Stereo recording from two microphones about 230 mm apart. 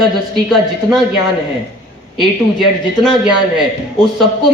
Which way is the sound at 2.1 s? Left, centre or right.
Centre.